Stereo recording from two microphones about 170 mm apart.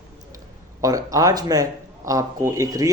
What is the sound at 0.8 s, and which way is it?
Speech, 20° right (ahead or behind).